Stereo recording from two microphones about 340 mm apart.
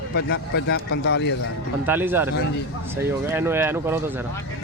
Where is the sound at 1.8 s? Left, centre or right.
Centre.